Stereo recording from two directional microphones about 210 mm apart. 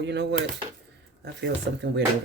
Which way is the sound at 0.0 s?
55° right (ahead or behind).